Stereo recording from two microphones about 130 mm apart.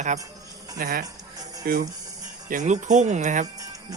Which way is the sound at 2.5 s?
70° right (ahead or behind).